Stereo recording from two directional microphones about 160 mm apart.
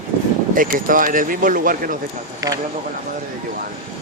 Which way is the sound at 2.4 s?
20° right (ahead or behind).